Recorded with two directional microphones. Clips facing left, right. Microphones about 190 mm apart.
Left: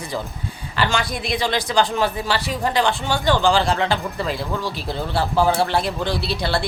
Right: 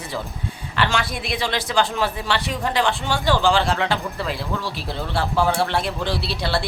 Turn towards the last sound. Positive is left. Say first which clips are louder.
# left 1 dB
turn(degrees=0)  # may be behind; listen again after turning